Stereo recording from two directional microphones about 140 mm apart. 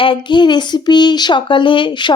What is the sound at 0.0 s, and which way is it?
Speech, 35° left (ahead or behind).